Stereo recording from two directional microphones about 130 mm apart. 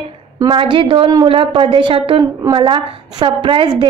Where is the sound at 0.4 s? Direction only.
40° right (ahead or behind).